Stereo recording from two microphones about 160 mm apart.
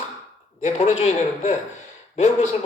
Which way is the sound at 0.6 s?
40° left (ahead or behind).